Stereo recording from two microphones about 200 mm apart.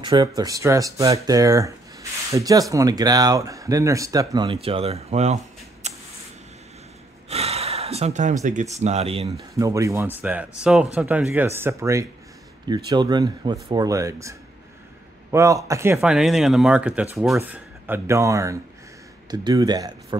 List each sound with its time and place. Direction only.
0.0 s speech: 25° right (ahead or behind)
7.2 s gasp: 30° right (ahead or behind)
8.5 s speech: 35° right (ahead or behind)
9.6 s speech: 15° right (ahead or behind)
15.3 s speech: 15° right (ahead or behind)